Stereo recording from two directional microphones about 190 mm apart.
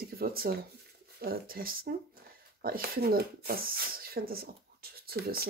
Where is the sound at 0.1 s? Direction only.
50° right (ahead or behind).